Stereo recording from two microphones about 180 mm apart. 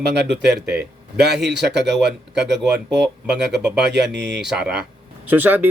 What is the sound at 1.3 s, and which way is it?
Speech, 70° right (ahead or behind).